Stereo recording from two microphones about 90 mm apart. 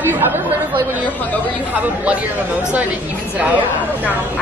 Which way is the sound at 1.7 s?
15° right (ahead or behind).